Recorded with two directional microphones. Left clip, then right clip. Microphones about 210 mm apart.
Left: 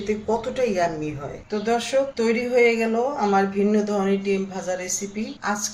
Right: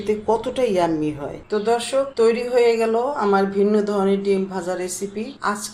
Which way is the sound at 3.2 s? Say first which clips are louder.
Right 2 dB; 15° right (ahead or behind).